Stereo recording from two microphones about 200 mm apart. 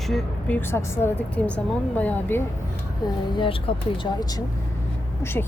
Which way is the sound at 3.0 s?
25° left (ahead or behind).